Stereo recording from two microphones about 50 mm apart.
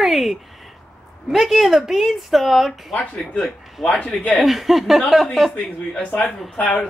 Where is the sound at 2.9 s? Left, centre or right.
Centre.